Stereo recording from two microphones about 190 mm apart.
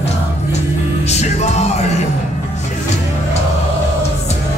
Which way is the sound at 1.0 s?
35° left (ahead or behind).